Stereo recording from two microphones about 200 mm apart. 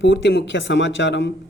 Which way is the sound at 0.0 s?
65° left (ahead or behind).